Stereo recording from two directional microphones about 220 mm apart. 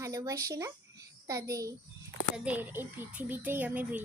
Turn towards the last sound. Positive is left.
turn(degrees=-10)  # may be behind; listen again after turning